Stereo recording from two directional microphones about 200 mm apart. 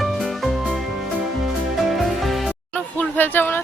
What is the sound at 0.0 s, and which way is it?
Music, centre (ahead or behind).